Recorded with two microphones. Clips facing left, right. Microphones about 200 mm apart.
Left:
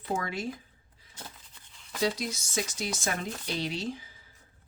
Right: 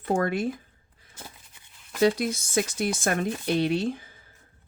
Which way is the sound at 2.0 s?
60° right (ahead or behind).